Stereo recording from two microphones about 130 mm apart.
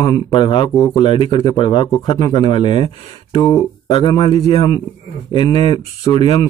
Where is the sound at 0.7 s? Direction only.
25° left (ahead or behind).